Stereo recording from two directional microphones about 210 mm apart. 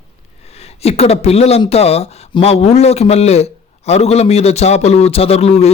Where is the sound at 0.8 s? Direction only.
30° left (ahead or behind).